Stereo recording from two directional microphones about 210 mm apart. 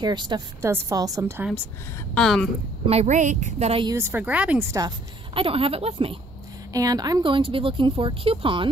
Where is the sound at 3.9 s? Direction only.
10° right (ahead or behind).